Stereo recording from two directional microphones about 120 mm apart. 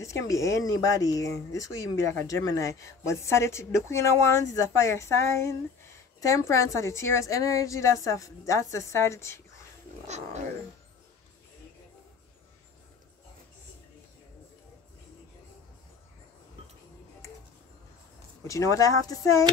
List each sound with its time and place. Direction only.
0.0 s speech: 25° left (ahead or behind)
10.0 s roaring cats: 70° right (ahead or behind)
18.5 s speech: 25° left (ahead or behind)